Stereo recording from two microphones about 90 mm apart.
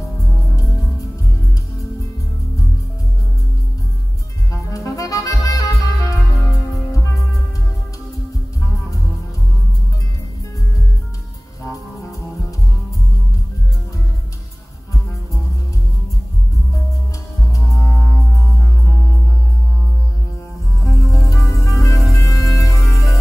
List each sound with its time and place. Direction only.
4.5 s music: 35° left (ahead or behind)
17.5 s music: 35° left (ahead or behind)
20.8 s music: 35° left (ahead or behind)